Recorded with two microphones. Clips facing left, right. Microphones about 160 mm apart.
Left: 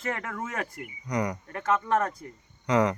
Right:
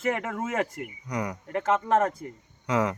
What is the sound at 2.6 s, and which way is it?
Speech, 5° right (ahead or behind).